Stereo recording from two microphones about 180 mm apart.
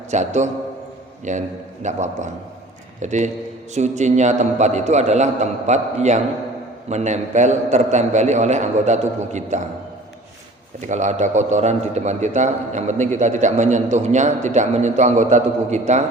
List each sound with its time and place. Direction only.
0.1 s a man's voice: 40° right (ahead or behind)
10.8 s a man's voice: 40° right (ahead or behind)